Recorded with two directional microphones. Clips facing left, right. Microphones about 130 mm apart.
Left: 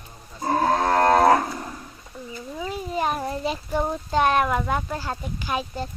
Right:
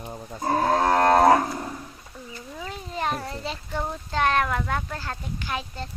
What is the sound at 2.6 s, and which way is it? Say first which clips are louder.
Speech: left 4 dB; 10° left (ahead or behind).